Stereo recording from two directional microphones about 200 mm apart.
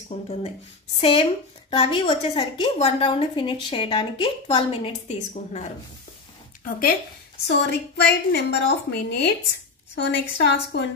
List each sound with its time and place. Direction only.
0.1 s a woman's voice: 30° left (ahead or behind)
7.4 s a woman's voice: 60° left (ahead or behind)